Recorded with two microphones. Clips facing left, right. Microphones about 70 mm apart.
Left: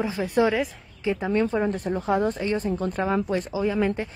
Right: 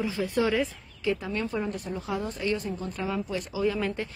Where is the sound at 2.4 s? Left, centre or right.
Left.